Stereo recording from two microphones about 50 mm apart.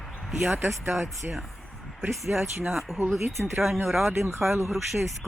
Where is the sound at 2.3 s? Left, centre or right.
Right.